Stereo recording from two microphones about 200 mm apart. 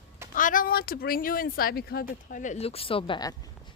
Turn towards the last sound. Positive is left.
turn(degrees=20)  # may be behind; listen again after turning